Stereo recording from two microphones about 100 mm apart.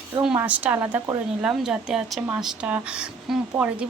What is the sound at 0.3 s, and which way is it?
Speech, 15° right (ahead or behind).